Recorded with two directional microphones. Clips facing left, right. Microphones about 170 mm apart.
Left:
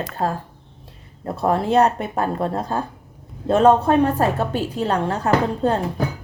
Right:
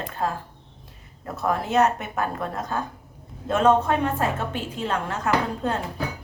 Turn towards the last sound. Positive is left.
turn(degrees=35)  # may be behind; listen again after turning